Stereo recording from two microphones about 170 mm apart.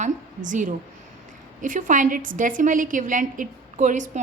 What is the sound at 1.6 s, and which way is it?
A woman's voice, 50° right (ahead or behind).